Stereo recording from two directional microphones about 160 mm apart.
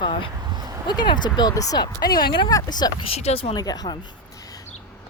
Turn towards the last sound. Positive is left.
turn(degrees=25)  # may be behind; listen again after turning